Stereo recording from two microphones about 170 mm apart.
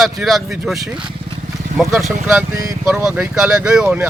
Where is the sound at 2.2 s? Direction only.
15° right (ahead or behind).